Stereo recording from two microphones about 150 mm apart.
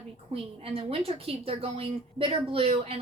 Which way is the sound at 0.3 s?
40° right (ahead or behind).